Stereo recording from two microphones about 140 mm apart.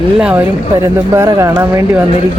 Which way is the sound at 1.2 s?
20° right (ahead or behind).